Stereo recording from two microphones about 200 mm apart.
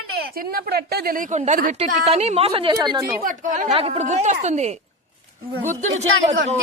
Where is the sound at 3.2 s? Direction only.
40° right (ahead or behind).